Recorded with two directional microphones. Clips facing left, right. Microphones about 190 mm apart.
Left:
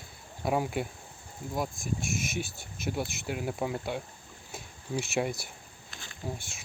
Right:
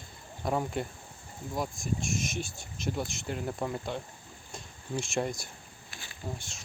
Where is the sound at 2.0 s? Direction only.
55° left (ahead or behind).